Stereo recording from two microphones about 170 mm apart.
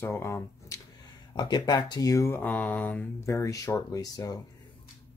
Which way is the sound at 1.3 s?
25° left (ahead or behind).